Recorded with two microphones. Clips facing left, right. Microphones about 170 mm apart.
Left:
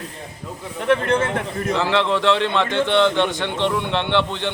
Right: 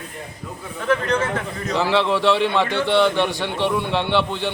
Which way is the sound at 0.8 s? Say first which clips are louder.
Left 2 dB; 25° left (ahead or behind).